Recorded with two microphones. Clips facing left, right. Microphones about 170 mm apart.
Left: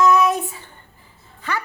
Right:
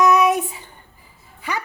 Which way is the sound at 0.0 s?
15° right (ahead or behind).